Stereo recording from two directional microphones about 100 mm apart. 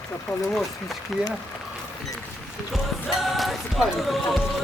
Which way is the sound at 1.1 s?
5° right (ahead or behind).